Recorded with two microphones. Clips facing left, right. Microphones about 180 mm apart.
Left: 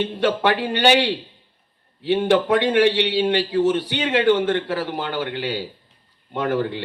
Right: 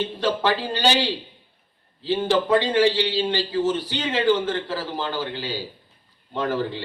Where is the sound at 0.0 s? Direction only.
65° left (ahead or behind).